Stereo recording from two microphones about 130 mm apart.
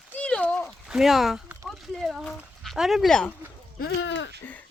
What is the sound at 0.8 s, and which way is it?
Speech, 5° right (ahead or behind).